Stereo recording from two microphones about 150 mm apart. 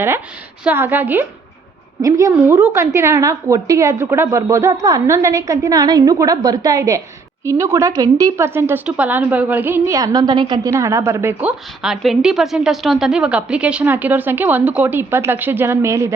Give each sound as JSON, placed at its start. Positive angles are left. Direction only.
{"t": 0.6, "sound": "a woman's voice", "side_deg": -10}